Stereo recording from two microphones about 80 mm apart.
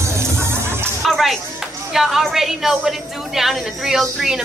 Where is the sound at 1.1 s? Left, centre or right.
Centre.